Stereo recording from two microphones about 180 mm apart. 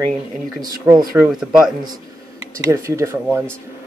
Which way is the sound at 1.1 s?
5° right (ahead or behind).